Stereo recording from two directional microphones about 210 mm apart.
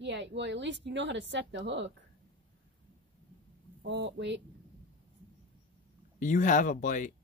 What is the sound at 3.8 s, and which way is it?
Speech, 60° right (ahead or behind).